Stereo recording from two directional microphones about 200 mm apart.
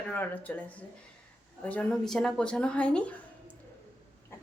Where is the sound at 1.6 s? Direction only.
5° left (ahead or behind).